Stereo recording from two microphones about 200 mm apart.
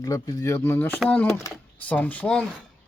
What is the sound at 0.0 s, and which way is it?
Speech, 15° left (ahead or behind).